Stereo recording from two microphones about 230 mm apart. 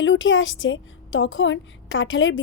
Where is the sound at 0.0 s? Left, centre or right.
Left.